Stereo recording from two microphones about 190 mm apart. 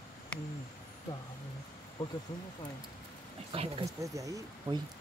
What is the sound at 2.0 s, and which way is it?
Speech, 25° left (ahead or behind).